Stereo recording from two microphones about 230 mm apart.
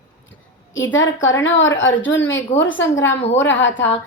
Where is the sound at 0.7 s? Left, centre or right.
Left.